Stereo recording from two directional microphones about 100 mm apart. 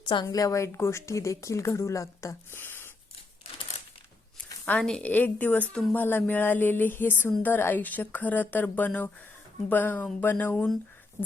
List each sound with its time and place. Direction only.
0.0 s a woman's voice: 50° left (ahead or behind)
0.3 s speech: 35° left (ahead or behind)
4.4 s a sound: 15° left (ahead or behind)
4.9 s speech: 10° left (ahead or behind)